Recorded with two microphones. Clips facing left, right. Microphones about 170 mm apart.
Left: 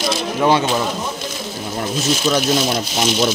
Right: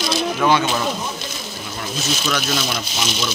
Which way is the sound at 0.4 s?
30° left (ahead or behind).